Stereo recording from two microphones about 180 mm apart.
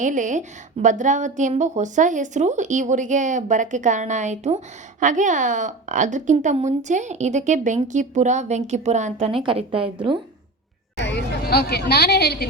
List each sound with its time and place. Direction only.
0.0 s a woman's voice: 45° right (ahead or behind); by 10.2 s 30° right (ahead or behind)
10.9 s speech: 70° left (ahead or behind)